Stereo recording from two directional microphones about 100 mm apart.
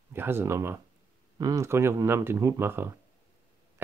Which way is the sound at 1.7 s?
25° right (ahead or behind).